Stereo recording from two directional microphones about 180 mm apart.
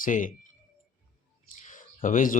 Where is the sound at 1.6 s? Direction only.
45° left (ahead or behind).